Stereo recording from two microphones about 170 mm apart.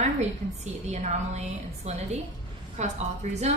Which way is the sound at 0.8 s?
40° right (ahead or behind).